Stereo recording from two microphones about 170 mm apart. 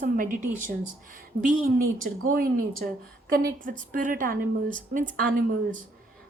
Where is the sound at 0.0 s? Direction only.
50° right (ahead or behind).